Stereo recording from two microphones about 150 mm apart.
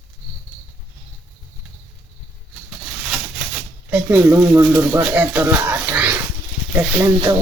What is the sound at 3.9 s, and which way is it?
Speech, 10° right (ahead or behind).